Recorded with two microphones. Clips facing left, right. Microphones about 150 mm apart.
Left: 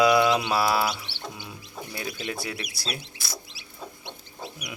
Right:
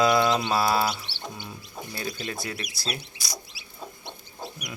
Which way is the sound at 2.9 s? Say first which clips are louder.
Right 2 dB; centre (ahead or behind).